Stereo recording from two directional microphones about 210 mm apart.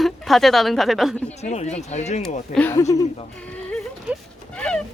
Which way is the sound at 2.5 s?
10° left (ahead or behind).